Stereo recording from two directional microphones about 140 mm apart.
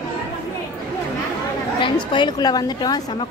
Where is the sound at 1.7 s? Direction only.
35° left (ahead or behind).